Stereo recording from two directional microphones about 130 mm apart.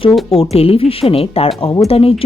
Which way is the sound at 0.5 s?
50° left (ahead or behind).